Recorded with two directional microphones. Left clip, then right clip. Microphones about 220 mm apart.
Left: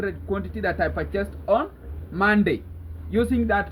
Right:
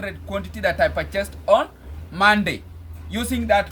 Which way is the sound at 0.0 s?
20° right (ahead or behind).